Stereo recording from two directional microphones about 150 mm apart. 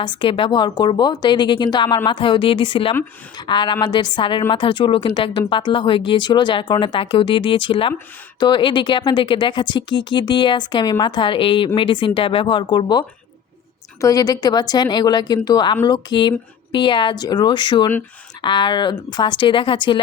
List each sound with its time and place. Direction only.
0.0 s speech: 30° left (ahead or behind)